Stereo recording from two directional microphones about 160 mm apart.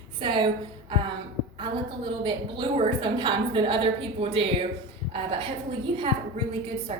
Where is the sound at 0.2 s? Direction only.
30° right (ahead or behind).